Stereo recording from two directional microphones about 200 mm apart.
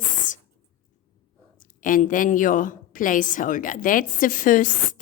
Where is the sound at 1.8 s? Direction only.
40° left (ahead or behind).